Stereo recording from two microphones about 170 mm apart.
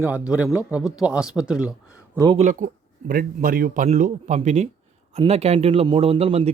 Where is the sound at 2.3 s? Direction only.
45° right (ahead or behind).